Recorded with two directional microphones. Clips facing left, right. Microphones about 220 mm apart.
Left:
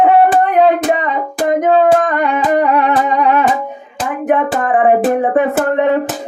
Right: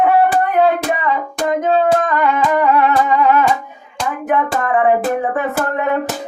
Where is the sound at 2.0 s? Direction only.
30° left (ahead or behind).